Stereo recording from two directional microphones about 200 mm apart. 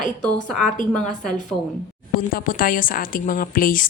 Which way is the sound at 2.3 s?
45° left (ahead or behind).